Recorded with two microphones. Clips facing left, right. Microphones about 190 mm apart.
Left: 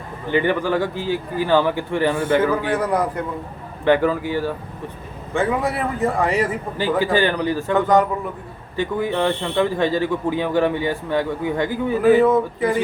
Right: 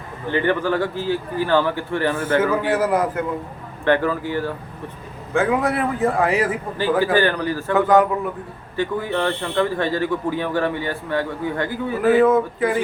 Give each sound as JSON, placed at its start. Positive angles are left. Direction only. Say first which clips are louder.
{"t": 0.3, "sound": "speech", "louder": "left 1 dB", "side_deg": 15}
{"t": 2.4, "sound": "a man's voice", "louder": "right 1 dB", "side_deg": -5}
{"t": 3.8, "sound": "speech", "louder": "left 2 dB", "side_deg": 15}
{"t": 5.3, "sound": "a man's voice", "louder": "right 2 dB", "side_deg": 0}
{"t": 7.0, "sound": "speech", "louder": "left 1 dB", "side_deg": 15}
{"t": 7.7, "sound": "a man's voice", "louder": "right 2 dB", "side_deg": 0}
{"t": 8.7, "sound": "speech", "louder": "left 1 dB", "side_deg": 15}
{"t": 12.2, "sound": "a man's voice", "louder": "even", "side_deg": 0}